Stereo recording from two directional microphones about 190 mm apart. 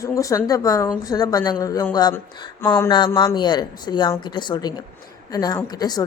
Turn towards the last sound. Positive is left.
turn(degrees=20)  # may be behind; listen again after turning